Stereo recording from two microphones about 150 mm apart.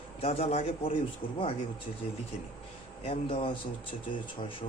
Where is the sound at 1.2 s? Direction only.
75° left (ahead or behind).